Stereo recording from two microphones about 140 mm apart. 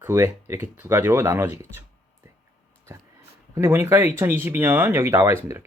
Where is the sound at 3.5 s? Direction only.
20° right (ahead or behind).